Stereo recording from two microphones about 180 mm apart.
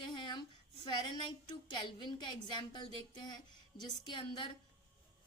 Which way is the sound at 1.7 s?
25° left (ahead or behind).